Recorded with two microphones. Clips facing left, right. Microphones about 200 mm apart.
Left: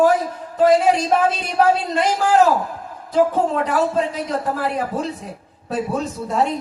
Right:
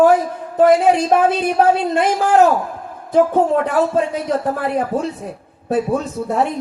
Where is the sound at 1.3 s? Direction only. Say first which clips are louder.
Right 3 dB; 55° right (ahead or behind).